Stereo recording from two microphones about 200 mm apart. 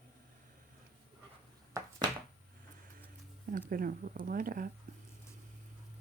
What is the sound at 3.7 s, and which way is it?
Speech, 45° right (ahead or behind).